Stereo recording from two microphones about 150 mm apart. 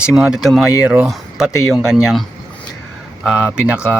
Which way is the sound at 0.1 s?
5° right (ahead or behind).